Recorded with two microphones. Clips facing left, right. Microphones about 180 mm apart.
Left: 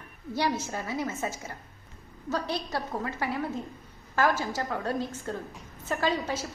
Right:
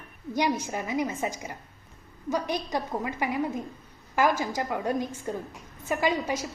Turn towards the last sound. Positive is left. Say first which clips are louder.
# right 2 dB
turn(degrees=-15)  # may be behind; listen again after turning